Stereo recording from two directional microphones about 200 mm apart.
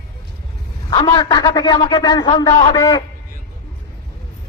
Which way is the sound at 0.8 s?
25° left (ahead or behind).